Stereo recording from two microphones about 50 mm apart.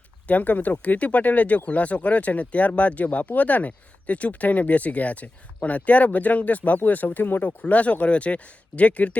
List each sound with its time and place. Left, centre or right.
0.3 s speech: left